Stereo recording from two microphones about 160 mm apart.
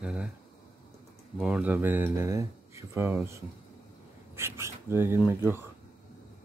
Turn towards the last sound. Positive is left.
turn(degrees=-15)  # may be behind; listen again after turning